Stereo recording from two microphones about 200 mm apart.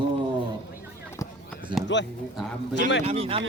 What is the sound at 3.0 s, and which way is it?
Speech, 30° right (ahead or behind).